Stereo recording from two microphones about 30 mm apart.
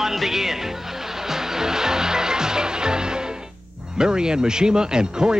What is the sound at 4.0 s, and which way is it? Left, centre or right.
Speech, right.